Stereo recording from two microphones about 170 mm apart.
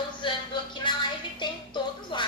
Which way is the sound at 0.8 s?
25° left (ahead or behind).